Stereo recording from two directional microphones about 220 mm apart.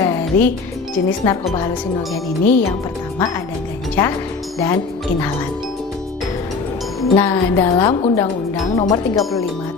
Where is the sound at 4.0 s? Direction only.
10° left (ahead or behind).